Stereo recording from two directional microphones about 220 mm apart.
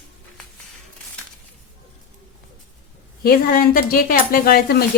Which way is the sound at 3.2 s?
40° left (ahead or behind).